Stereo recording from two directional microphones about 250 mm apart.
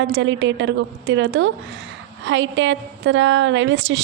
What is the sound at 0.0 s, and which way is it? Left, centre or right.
A woman's voice, right.